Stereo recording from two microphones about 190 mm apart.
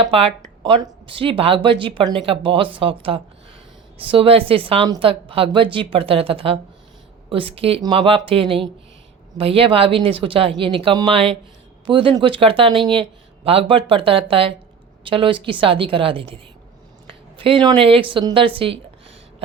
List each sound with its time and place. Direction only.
0.1 s a woman's voice: 30° right (ahead or behind)